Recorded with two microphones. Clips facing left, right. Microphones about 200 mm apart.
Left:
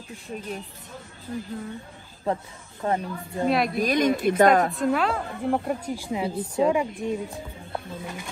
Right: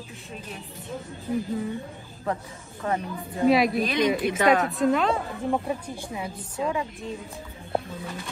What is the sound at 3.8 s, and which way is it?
Speech, 45° left (ahead or behind).